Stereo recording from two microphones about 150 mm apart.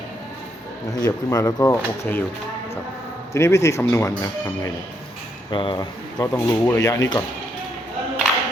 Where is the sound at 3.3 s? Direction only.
20° left (ahead or behind).